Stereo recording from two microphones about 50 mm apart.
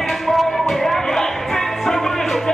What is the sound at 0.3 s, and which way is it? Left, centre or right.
Music, centre.